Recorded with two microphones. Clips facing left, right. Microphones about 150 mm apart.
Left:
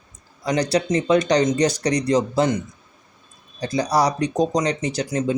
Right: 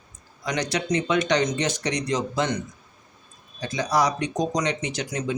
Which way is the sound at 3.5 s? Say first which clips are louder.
Left 3 dB; 35° left (ahead or behind).